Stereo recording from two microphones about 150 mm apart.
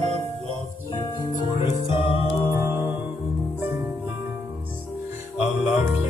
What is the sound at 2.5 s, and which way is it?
Music, 15° right (ahead or behind).